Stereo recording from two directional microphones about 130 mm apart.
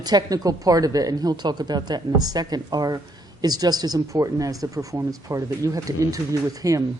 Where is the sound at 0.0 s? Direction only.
30° right (ahead or behind).